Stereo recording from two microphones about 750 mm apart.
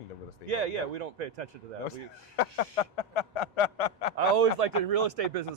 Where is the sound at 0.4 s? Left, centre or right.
Right.